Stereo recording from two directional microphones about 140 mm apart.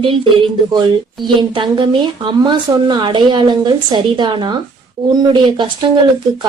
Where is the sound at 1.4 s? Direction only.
35° right (ahead or behind).